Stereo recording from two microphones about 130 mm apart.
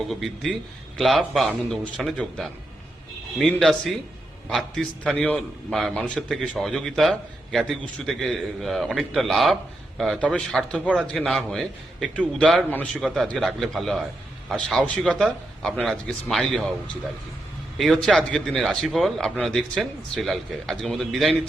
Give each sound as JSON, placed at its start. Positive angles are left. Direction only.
{"t": 0.1, "sound": "a man's voice", "side_deg": 0}
{"t": 3.6, "sound": "a man's voice", "side_deg": 0}